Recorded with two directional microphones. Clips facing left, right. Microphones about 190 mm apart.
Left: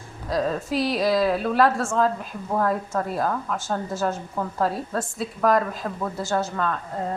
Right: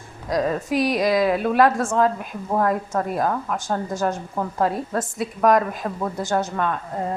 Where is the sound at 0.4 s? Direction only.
15° right (ahead or behind).